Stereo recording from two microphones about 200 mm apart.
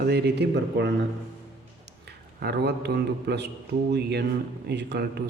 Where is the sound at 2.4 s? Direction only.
55° right (ahead or behind).